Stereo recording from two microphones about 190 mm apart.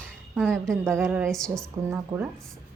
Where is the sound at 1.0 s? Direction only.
10° right (ahead or behind).